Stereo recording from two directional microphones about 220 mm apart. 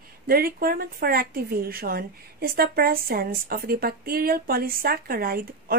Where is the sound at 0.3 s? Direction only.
40° right (ahead or behind).